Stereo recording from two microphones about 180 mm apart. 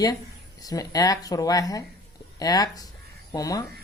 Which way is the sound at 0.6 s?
20° left (ahead or behind).